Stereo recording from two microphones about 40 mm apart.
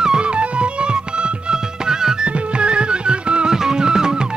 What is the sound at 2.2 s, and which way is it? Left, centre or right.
Music, right.